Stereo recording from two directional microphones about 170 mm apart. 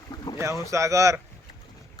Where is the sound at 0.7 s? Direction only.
20° right (ahead or behind).